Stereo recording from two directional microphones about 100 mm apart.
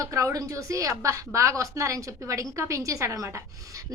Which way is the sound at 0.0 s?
30° right (ahead or behind).